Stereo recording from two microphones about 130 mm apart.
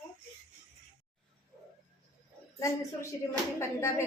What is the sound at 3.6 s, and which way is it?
Speech, 20° left (ahead or behind).